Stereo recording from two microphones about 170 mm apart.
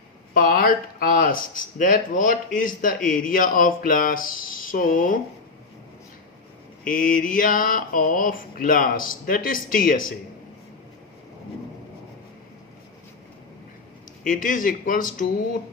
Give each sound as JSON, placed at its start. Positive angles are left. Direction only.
{"t": 0.3, "sound": "speech", "side_deg": 60}
{"t": 6.8, "sound": "speech", "side_deg": 50}
{"t": 14.3, "sound": "speech", "side_deg": 50}